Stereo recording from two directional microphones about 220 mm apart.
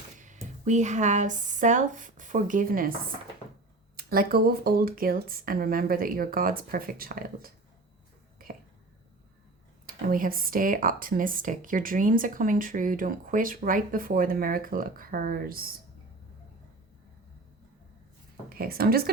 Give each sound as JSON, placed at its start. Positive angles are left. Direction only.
{"t": 0.6, "sound": "speech", "side_deg": -30}
{"t": 3.9, "sound": "speech", "side_deg": -40}
{"t": 8.4, "sound": "whispering", "side_deg": -40}
{"t": 9.8, "sound": "speech", "side_deg": -40}
{"t": 18.4, "sound": "speech", "side_deg": -45}